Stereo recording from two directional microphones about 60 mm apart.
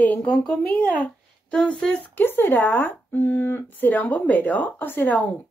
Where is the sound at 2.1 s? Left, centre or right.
Left.